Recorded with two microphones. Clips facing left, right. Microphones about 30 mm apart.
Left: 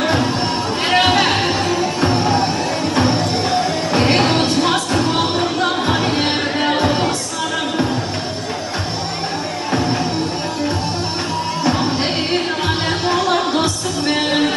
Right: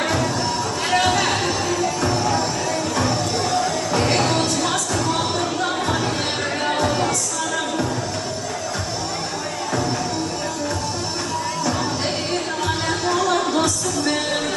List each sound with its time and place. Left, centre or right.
0.0 s music: left
9.7 s music: left
11.6 s music: left